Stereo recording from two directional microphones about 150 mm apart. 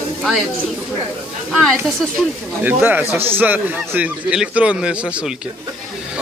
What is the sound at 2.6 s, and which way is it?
A man's voice, 10° right (ahead or behind).